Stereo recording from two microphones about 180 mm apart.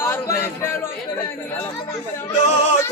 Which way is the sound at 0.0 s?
15° left (ahead or behind).